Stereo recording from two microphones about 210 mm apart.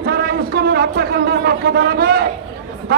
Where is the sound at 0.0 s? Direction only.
45° right (ahead or behind).